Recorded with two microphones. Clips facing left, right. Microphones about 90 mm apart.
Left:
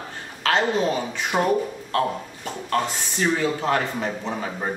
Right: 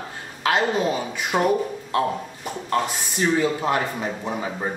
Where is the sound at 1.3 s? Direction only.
Centre (ahead or behind).